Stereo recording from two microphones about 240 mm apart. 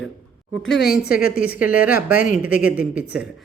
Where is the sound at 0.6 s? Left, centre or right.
Left.